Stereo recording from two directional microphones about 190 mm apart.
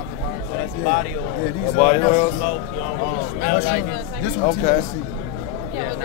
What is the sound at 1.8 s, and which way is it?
Speech, 35° left (ahead or behind).